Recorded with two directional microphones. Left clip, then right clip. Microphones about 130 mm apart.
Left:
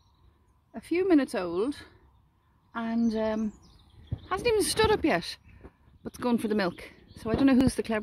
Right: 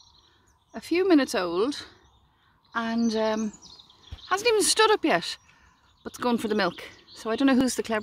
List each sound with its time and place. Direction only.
0.7 s speech: 20° left (ahead or behind)
2.7 s a sound: 20° left (ahead or behind)
3.1 s speech: 20° left (ahead or behind)